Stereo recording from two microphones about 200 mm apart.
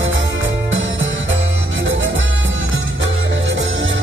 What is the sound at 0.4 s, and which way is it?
Music, 70° right (ahead or behind).